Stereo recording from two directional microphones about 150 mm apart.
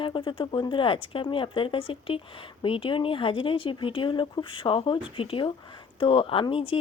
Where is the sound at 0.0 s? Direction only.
35° left (ahead or behind).